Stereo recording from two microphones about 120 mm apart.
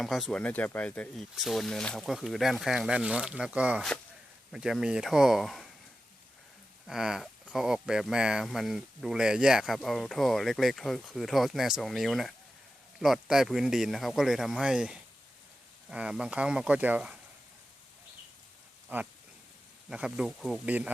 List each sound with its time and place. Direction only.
0.0 s speech: centre (ahead or behind)
6.8 s speech: 5° right (ahead or behind)
18.9 s speech: 15° right (ahead or behind)